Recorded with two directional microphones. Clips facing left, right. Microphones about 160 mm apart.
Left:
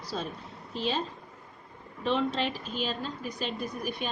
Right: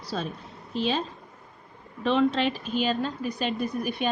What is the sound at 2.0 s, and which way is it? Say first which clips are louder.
A woman's voice: right 5 dB; 75° right (ahead or behind).